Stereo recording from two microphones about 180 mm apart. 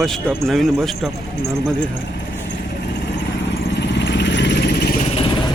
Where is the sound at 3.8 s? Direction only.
75° left (ahead or behind).